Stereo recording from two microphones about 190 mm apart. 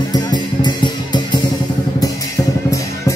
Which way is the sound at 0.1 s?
20° left (ahead or behind).